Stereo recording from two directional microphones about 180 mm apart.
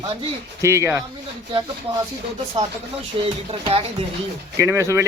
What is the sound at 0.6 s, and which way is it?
Speech, 15° right (ahead or behind).